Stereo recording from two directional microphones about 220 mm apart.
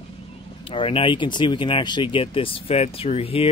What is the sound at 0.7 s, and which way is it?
Speech, 25° left (ahead or behind).